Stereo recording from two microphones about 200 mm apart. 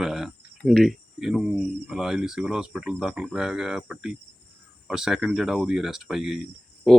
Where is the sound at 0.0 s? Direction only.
Centre (ahead or behind).